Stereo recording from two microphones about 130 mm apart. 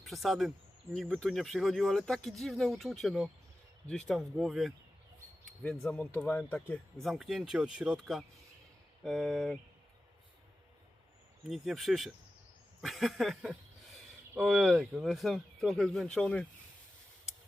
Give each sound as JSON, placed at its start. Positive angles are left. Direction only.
{"t": 0.0, "sound": "speech", "side_deg": 0}
{"t": 5.8, "sound": "speech", "side_deg": 5}
{"t": 7.0, "sound": "speech", "side_deg": 0}
{"t": 11.4, "sound": "speech", "side_deg": 0}